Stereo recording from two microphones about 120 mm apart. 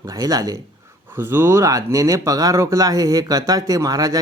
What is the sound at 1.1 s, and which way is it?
Speech, 20° right (ahead or behind).